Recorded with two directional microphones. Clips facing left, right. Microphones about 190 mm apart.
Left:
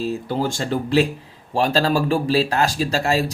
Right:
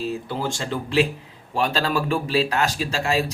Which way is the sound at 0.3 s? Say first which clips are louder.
Left 4 dB; 40° left (ahead or behind).